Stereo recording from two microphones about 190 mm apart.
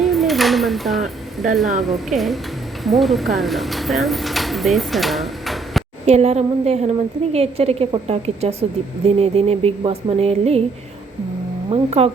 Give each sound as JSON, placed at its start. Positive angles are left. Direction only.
{"t": 0.0, "sound": "a woman's voice", "side_deg": 0}
{"t": 6.1, "sound": "music", "side_deg": -35}
{"t": 11.7, "sound": "music", "side_deg": -30}